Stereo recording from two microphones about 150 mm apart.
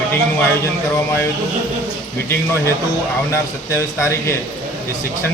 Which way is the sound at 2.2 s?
15° left (ahead or behind).